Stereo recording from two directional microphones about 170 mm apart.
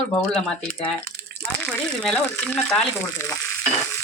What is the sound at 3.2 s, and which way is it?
Stir, 15° left (ahead or behind).